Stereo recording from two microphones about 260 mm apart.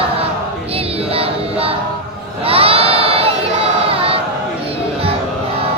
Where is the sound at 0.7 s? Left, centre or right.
Right.